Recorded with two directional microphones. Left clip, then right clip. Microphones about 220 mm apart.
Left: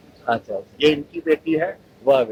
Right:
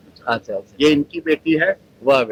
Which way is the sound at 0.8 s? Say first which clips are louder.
Right 2 dB; 60° right (ahead or behind).